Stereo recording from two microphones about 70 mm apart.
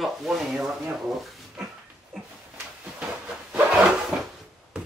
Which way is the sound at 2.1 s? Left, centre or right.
Centre.